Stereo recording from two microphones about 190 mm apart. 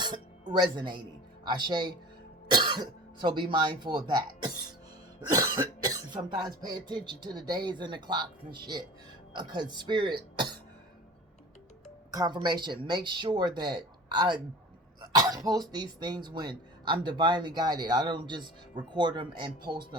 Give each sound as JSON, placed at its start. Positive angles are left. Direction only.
{"t": 0.5, "sound": "speech", "side_deg": -25}
{"t": 12.1, "sound": "speech", "side_deg": -20}